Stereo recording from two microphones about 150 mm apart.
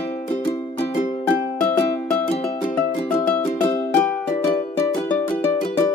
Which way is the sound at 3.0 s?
15° left (ahead or behind).